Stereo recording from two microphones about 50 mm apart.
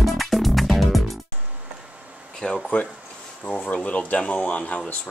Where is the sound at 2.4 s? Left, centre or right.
Left.